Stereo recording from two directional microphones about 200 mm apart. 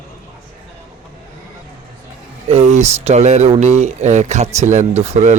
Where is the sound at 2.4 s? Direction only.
35° right (ahead or behind).